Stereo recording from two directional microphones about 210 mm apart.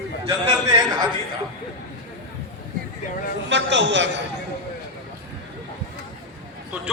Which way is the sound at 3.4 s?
60° right (ahead or behind).